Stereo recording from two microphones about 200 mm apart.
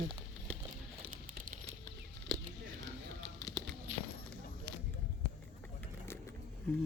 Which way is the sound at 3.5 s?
Centre (ahead or behind).